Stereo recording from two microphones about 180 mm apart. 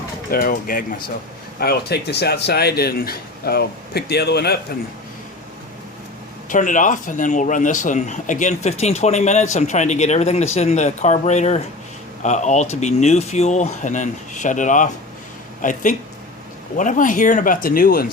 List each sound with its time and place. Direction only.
0.3 s speech: 55° left (ahead or behind)
1.5 s speech: 60° left (ahead or behind)
6.5 s speech: 45° left (ahead or behind)